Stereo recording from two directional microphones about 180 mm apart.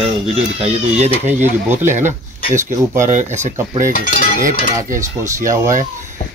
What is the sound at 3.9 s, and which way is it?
Cutlery, 50° left (ahead or behind).